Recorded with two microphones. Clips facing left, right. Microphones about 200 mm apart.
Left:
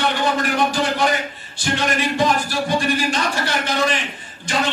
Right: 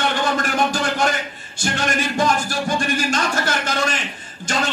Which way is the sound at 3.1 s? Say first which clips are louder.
Even; 45° right (ahead or behind).